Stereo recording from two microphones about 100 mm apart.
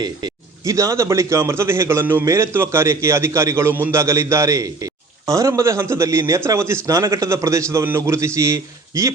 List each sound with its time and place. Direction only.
0.0 s a man's voice: 35° right (ahead or behind)